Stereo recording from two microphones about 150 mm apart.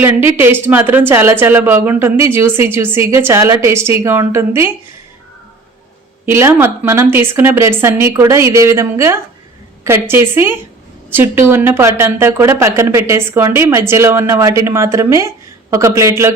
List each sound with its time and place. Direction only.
0.0 s speech: 15° right (ahead or behind)
6.2 s a woman's voice: 15° right (ahead or behind)